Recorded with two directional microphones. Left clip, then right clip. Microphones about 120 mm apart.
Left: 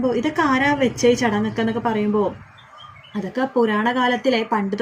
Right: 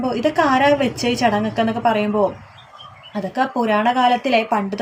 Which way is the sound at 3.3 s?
25° right (ahead or behind).